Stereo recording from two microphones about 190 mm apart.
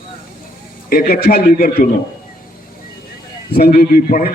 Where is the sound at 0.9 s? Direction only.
50° left (ahead or behind).